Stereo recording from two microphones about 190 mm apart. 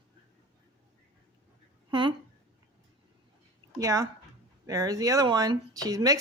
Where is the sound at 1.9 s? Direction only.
25° right (ahead or behind).